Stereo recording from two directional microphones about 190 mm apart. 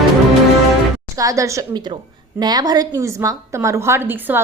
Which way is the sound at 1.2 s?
15° right (ahead or behind).